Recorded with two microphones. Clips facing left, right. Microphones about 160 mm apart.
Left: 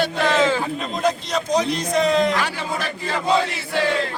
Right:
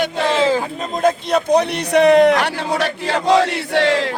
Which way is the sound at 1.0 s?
55° right (ahead or behind).